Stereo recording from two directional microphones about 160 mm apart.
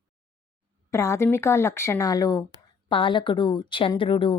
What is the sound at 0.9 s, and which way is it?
Speech, 15° left (ahead or behind).